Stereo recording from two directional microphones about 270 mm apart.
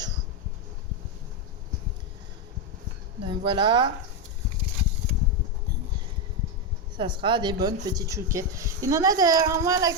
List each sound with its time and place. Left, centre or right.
3.2 s a woman's voice: centre
6.9 s a woman's voice: centre